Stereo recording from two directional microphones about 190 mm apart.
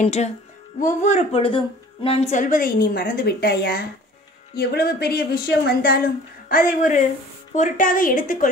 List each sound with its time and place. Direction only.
0.0 s a woman's voice: 35° left (ahead or behind)